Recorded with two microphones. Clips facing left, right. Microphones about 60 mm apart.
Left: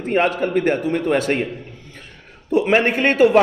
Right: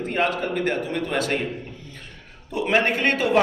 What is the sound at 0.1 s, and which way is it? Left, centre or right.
A man's voice, left.